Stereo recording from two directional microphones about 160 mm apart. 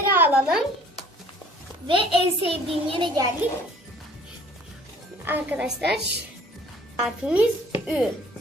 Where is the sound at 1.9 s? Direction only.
35° right (ahead or behind).